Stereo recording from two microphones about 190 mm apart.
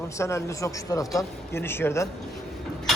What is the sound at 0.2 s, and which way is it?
A man's voice, 15° left (ahead or behind).